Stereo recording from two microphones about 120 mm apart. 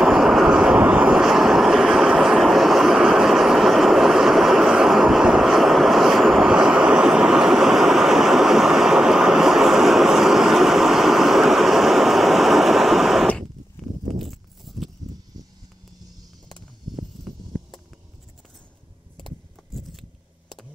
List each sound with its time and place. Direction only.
0.0 s vehicle: 5° right (ahead or behind)
15.3 s a sound: 30° right (ahead or behind)
20.0 s keys jangling: centre (ahead or behind)